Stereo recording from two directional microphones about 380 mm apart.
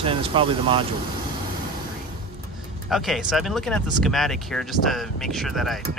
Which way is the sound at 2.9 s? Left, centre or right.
Centre.